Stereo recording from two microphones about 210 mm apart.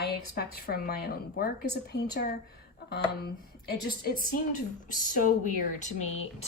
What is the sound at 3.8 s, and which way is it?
A woman's voice, 45° left (ahead or behind).